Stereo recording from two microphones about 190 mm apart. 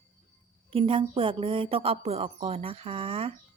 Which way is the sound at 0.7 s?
30° right (ahead or behind).